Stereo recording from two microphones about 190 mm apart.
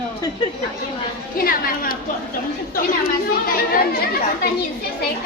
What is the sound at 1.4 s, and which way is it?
Speech, 50° left (ahead or behind).